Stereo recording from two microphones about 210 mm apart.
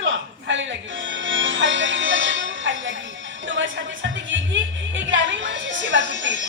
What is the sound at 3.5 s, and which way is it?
Music, 60° right (ahead or behind).